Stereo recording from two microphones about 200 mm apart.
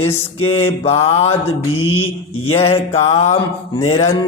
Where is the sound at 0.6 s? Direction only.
30° left (ahead or behind).